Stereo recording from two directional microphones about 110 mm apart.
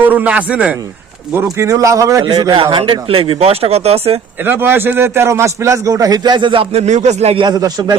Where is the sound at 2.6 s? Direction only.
50° right (ahead or behind).